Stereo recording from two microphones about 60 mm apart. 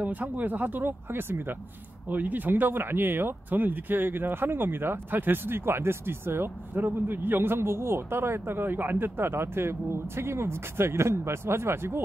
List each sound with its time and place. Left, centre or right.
0.0 s speech: right